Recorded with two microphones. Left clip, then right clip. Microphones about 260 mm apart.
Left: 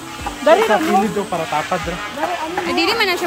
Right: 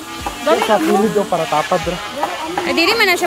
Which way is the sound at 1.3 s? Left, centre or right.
Right.